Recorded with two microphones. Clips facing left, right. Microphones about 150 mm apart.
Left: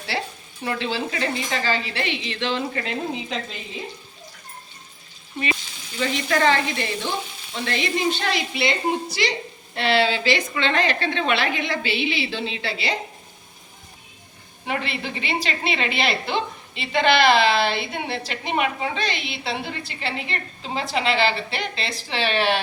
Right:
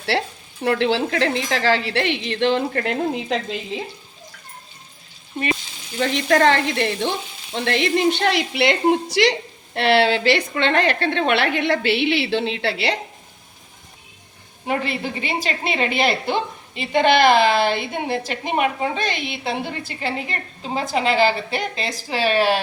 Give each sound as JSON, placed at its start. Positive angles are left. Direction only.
{"t": 0.1, "sound": "frying", "side_deg": -70}
{"t": 0.6, "sound": "a woman's voice", "side_deg": -65}
{"t": 6.0, "sound": "a woman's voice", "side_deg": -55}
{"t": 9.7, "sound": "a woman's voice", "side_deg": -60}
{"t": 14.7, "sound": "a woman's voice", "side_deg": -45}